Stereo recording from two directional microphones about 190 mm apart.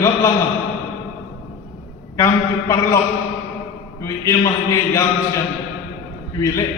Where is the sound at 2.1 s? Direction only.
15° left (ahead or behind).